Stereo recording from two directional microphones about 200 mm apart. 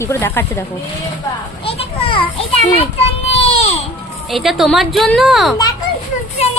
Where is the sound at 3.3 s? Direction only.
30° left (ahead or behind).